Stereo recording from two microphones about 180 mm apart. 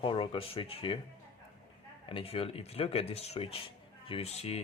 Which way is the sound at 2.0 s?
30° left (ahead or behind).